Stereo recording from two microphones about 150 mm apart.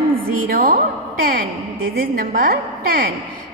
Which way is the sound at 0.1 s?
75° right (ahead or behind).